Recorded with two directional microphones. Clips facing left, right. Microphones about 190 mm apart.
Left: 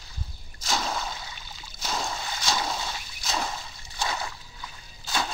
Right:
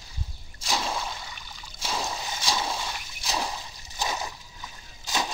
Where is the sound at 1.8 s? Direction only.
5° right (ahead or behind).